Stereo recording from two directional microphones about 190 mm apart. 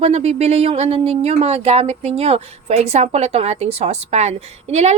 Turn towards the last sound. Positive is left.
turn(degrees=-35)  # may be behind; listen again after turning